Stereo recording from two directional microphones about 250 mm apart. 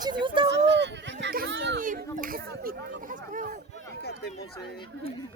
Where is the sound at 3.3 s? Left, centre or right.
Right.